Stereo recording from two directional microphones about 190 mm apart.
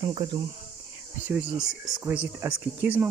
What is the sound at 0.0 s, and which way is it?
Speech, 30° right (ahead or behind).